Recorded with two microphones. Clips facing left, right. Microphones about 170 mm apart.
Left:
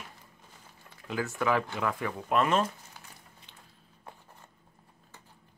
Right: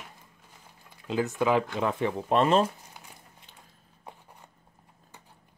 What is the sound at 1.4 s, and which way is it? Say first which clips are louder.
Speech: right 3 dB; 20° right (ahead or behind).